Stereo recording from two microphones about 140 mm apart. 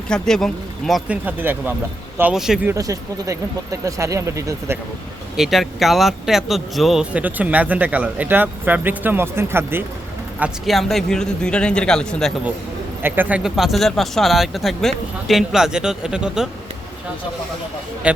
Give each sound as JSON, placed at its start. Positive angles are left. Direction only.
{"t": 0.1, "sound": "speech", "side_deg": 5}
{"t": 2.3, "sound": "speech", "side_deg": -5}
{"t": 2.6, "sound": "speech", "side_deg": -25}
{"t": 5.4, "sound": "speech", "side_deg": 0}
{"t": 10.4, "sound": "speech", "side_deg": 0}
{"t": 13.0, "sound": "speech", "side_deg": -15}
{"t": 18.0, "sound": "speech", "side_deg": -10}